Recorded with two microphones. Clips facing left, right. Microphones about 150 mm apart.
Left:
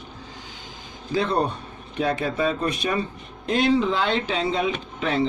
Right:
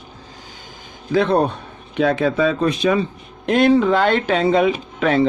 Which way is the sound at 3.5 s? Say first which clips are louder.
Right 6 dB; 60° right (ahead or behind).